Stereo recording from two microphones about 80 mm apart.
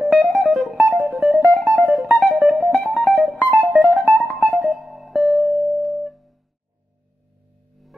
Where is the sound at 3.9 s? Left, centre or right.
Centre.